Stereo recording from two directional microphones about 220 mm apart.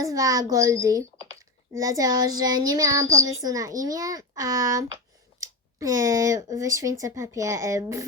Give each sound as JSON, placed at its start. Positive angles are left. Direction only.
{"t": 0.0, "sound": "speech", "side_deg": -15}